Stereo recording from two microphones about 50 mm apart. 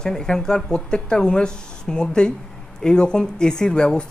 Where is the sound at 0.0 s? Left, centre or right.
Centre.